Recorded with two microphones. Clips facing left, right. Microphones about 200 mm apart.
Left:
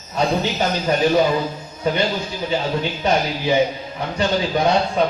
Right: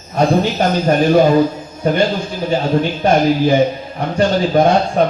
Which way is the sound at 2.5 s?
50° right (ahead or behind).